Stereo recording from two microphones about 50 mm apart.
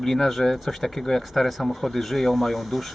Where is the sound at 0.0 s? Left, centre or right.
Centre.